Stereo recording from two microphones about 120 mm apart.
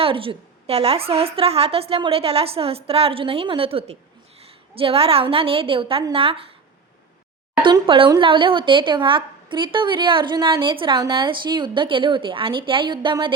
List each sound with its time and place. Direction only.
0.0 s a woman's voice: 50° right (ahead or behind)
7.6 s a woman's voice: 45° right (ahead or behind)